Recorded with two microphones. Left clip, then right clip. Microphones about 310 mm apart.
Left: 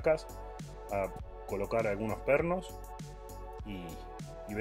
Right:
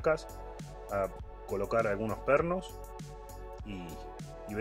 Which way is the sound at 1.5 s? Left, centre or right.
Centre.